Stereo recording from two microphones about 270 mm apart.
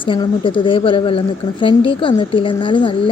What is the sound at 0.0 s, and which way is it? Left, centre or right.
Speech, centre.